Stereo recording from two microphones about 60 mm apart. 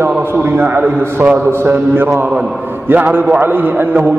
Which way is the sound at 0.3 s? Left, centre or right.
Right.